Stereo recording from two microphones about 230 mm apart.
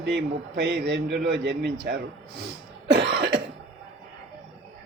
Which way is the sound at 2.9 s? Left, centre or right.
Right.